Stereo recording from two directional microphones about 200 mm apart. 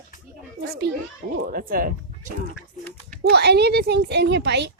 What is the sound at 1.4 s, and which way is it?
Speech, 45° right (ahead or behind).